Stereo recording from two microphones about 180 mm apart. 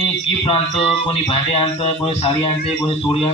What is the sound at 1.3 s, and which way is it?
A man's voice, 30° left (ahead or behind).